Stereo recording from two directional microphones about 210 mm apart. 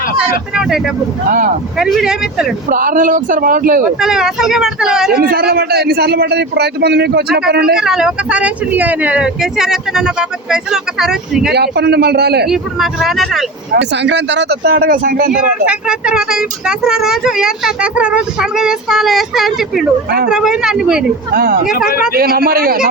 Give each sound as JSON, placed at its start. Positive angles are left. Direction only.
{"t": 0.2, "sound": "speech", "side_deg": -5}
{"t": 1.8, "sound": "speech", "side_deg": 0}
{"t": 2.6, "sound": "speech", "side_deg": -40}
{"t": 4.0, "sound": "speech", "side_deg": -5}
{"t": 5.1, "sound": "a man's voice", "side_deg": -45}
{"t": 7.8, "sound": "speech", "side_deg": -5}
{"t": 11.5, "sound": "a man's voice", "side_deg": -50}
{"t": 12.5, "sound": "speech", "side_deg": 0}
{"t": 13.7, "sound": "a man's voice", "side_deg": -55}
{"t": 15.6, "sound": "speech", "side_deg": -5}
{"t": 21.3, "sound": "a man's voice", "side_deg": -45}
{"t": 21.7, "sound": "speech", "side_deg": 45}
{"t": 22.1, "sound": "a man's voice", "side_deg": -45}